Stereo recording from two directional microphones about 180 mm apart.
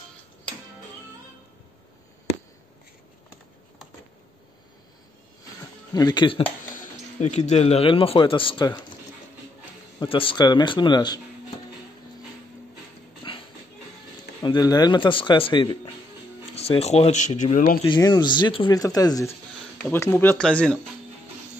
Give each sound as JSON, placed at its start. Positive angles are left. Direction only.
{"t": 5.9, "sound": "speech", "side_deg": 25}
{"t": 7.2, "sound": "speech", "side_deg": 40}
{"t": 9.9, "sound": "speech", "side_deg": 30}
{"t": 13.2, "sound": "a sound", "side_deg": 25}
{"t": 14.4, "sound": "speech", "side_deg": 25}
{"t": 17.8, "sound": "speech", "side_deg": 25}